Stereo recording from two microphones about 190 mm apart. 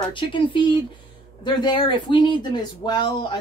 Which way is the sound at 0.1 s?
25° left (ahead or behind).